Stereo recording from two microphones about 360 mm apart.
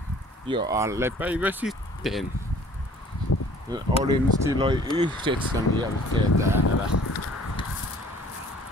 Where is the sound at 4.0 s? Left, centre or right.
Centre.